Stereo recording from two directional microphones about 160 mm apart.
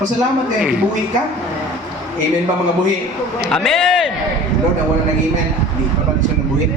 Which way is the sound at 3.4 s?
5° left (ahead or behind).